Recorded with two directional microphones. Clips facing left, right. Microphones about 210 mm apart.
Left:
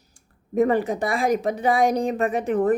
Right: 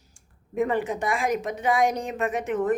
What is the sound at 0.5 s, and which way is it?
A woman's voice, 40° left (ahead or behind).